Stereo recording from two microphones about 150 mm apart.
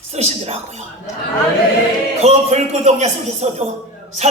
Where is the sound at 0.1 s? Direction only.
45° right (ahead or behind).